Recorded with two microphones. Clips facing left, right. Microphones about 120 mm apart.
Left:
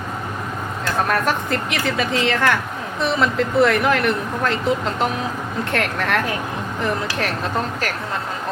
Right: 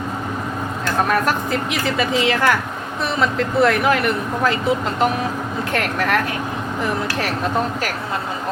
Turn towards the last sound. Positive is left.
turn(degrees=-5)  # may be behind; listen again after turning